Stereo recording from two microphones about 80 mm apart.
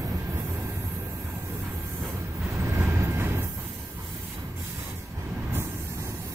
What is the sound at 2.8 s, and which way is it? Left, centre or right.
Vehicle, right.